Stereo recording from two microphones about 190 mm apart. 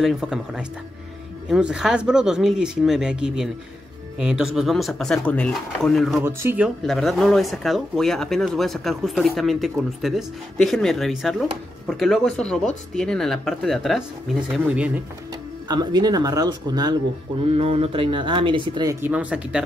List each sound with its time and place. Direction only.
0.0 s speech: 5° right (ahead or behind)
6.2 s speech: 10° right (ahead or behind)
6.8 s speech: centre (ahead or behind)
15.7 s speech: 20° right (ahead or behind)
17.6 s speech: 30° right (ahead or behind); by 19.6 s 5° right (ahead or behind)